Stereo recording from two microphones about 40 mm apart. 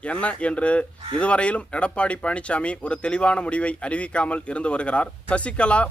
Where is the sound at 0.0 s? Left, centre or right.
Left.